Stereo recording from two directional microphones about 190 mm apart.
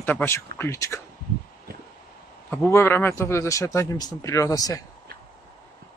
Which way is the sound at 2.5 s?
15° left (ahead or behind).